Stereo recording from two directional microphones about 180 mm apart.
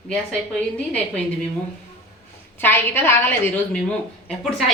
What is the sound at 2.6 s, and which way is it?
A woman's voice, 10° left (ahead or behind).